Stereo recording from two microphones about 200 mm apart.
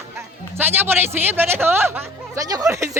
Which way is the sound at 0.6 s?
10° right (ahead or behind).